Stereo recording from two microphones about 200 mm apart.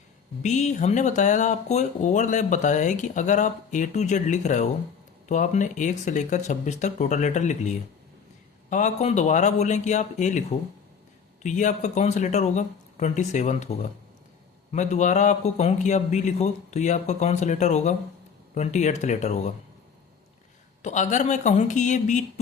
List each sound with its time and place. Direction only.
0.4 s speech: 35° left (ahead or behind)
8.7 s speech: 35° left (ahead or behind)
11.4 s speech: 40° left (ahead or behind)
14.7 s speech: 35° left (ahead or behind)
20.8 s speech: 35° left (ahead or behind)